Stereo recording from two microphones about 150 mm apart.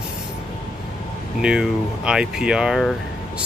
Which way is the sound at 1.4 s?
5° right (ahead or behind).